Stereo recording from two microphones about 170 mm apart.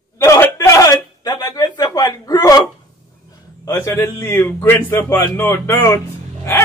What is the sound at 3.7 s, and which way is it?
A man's voice, 15° left (ahead or behind).